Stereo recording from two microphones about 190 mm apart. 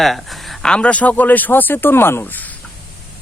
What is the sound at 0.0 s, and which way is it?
Speech, centre (ahead or behind).